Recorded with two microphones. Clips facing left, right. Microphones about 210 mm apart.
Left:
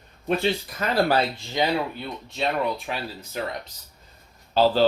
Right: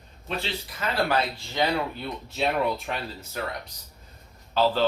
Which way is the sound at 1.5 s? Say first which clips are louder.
Left 1 dB; 5° left (ahead or behind).